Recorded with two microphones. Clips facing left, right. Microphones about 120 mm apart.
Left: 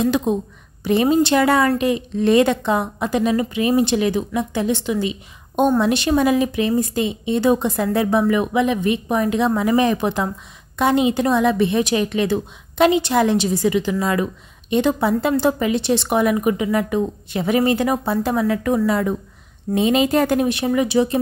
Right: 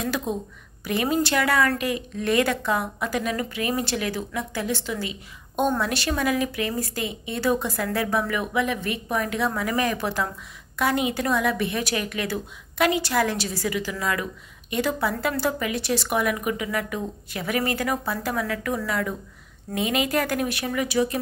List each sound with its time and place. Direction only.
0.0 s a woman's voice: 20° left (ahead or behind)